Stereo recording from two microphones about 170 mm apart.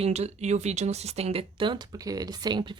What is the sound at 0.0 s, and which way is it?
A woman's voice, 40° right (ahead or behind).